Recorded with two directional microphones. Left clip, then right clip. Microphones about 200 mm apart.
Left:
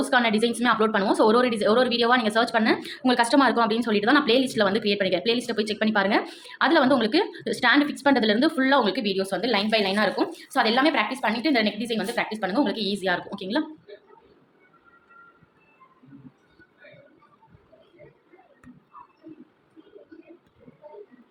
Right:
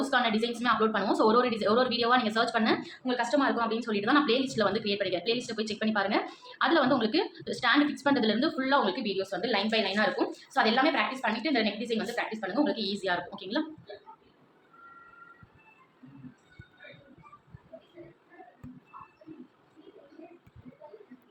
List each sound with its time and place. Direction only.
0.1 s a woman's voice: 35° left (ahead or behind)